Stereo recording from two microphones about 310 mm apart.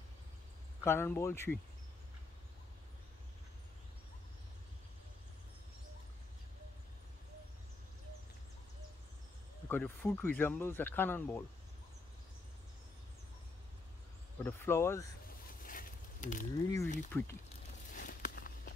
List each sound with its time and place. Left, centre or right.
0.8 s speech: centre
9.7 s speech: centre
14.4 s speech: centre
15.2 s a sound: left
16.6 s speech: centre
17.9 s walk: left